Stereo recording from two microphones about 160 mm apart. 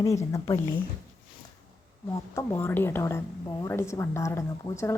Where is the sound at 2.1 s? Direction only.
15° left (ahead or behind).